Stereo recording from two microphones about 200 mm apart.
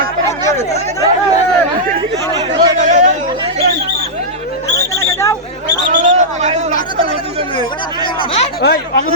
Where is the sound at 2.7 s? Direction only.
35° right (ahead or behind).